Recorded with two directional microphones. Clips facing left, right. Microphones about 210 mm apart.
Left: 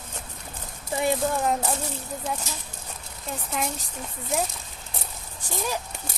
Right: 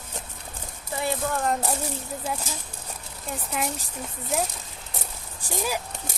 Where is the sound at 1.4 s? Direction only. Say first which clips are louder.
Left 1 dB; 5° left (ahead or behind).